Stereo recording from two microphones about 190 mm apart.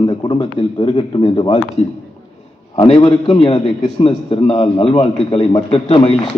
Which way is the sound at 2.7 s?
30° left (ahead or behind).